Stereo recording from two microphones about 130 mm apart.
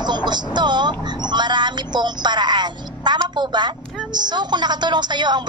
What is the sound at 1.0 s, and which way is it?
A woman's voice, 35° right (ahead or behind).